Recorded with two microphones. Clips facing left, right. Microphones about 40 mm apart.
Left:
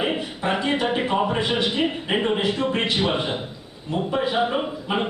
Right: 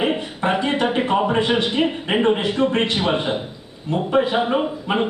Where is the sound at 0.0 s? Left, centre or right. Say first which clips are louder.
Right 3 dB; centre.